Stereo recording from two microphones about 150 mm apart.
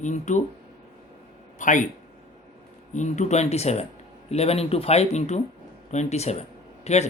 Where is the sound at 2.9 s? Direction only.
55° left (ahead or behind).